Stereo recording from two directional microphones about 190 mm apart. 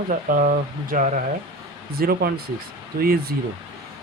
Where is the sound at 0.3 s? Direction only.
45° right (ahead or behind).